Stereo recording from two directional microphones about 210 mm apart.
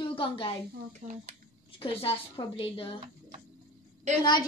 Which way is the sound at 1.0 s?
35° right (ahead or behind).